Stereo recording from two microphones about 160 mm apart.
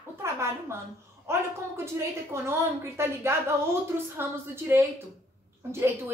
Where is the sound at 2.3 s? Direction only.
15° right (ahead or behind).